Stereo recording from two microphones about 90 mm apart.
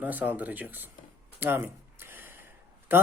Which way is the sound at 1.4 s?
25° right (ahead or behind).